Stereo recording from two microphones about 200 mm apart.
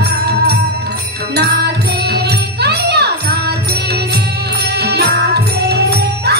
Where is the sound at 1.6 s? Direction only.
55° right (ahead or behind).